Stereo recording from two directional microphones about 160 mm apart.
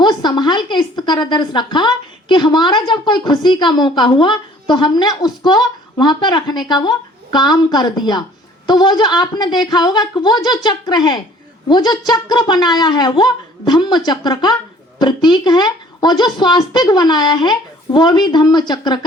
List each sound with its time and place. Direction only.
0.0 s speech: 25° left (ahead or behind)